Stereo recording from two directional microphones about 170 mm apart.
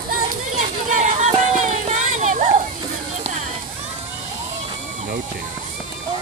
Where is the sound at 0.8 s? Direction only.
45° right (ahead or behind).